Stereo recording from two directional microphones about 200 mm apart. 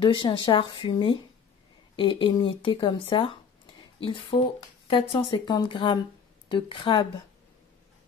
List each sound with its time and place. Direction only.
0.0 s speech: 25° left (ahead or behind)